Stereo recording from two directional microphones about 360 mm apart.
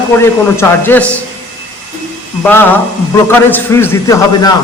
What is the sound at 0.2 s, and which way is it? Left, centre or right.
Speech, centre.